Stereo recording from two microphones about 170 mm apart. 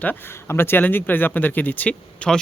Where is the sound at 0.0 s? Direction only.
10° left (ahead or behind).